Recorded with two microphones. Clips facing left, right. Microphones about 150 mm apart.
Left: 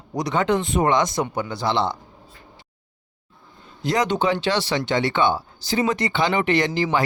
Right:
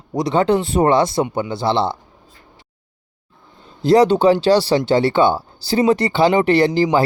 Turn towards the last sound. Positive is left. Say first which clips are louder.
# right 6 dB
turn(degrees=-35)  # may be behind; listen again after turning